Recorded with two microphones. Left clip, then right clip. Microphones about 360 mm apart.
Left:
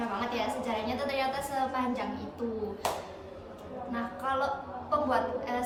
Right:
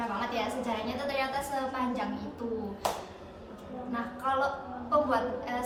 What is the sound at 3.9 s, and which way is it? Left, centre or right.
A woman's voice, centre.